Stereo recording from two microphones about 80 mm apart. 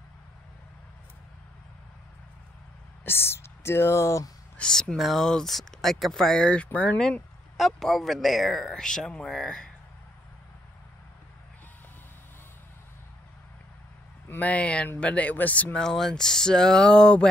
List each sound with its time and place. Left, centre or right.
3.1 s speech: left
4.6 s speech: centre
14.3 s speech: centre